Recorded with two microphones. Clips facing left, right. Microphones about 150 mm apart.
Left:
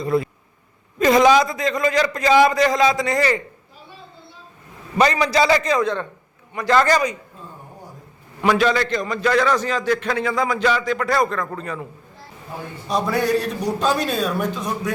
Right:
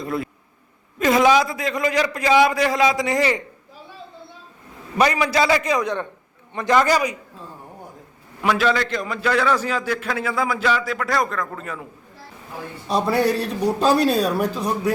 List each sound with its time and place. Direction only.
0.0 s a man's voice: centre (ahead or behind)
4.9 s a man's voice: 10° right (ahead or behind); by 6.7 s 25° right (ahead or behind)
6.7 s a man's voice: 10° right (ahead or behind)
8.4 s a man's voice: centre (ahead or behind)
12.9 s a man's voice: 30° right (ahead or behind)